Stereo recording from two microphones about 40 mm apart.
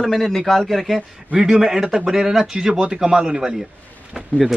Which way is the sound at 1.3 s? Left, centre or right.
Centre.